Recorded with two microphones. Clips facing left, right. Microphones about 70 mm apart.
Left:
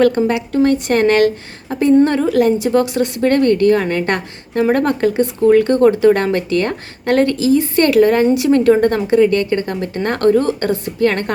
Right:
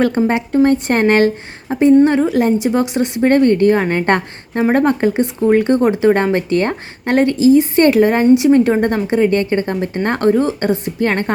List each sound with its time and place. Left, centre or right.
0.3 s speech: right